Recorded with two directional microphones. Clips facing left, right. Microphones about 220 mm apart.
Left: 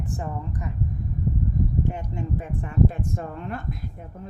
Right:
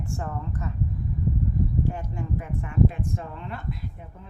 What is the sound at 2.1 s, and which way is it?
A woman's voice, 25° left (ahead or behind).